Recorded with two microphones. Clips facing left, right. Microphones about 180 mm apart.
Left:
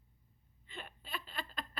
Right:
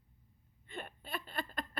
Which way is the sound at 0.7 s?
50° right (ahead or behind).